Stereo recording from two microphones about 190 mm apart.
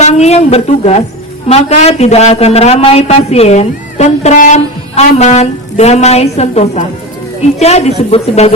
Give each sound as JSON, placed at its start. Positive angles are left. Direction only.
{"t": 0.0, "sound": "a man's voice", "side_deg": 35}